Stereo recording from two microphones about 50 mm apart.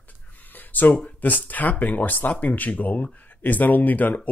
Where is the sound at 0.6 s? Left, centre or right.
Left.